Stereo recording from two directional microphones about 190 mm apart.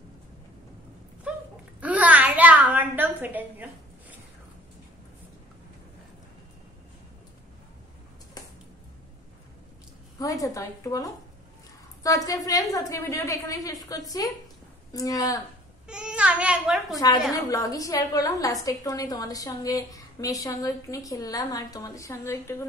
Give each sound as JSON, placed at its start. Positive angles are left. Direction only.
{"t": 1.8, "sound": "a sound", "side_deg": -10}
{"t": 10.1, "sound": "a woman's voice", "side_deg": 20}
{"t": 15.9, "sound": "a child's voice", "side_deg": -5}
{"t": 17.3, "sound": "a woman's voice", "side_deg": 20}